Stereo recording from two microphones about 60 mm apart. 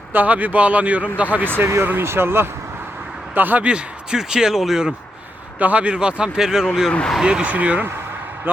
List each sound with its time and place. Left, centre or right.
0.1 s speech: right
1.5 s speech: right
3.3 s speech: right
3.7 s a man's voice: centre
5.5 s a man's voice: right
7.4 s speech: right